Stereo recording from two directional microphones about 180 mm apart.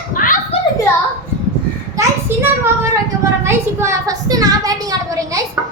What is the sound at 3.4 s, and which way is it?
A woman's voice, 15° right (ahead or behind).